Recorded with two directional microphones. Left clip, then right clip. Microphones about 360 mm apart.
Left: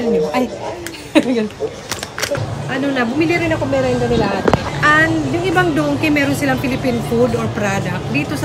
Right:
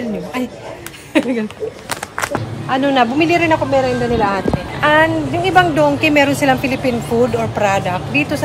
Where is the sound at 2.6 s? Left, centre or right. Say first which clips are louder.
Right 5 dB; centre.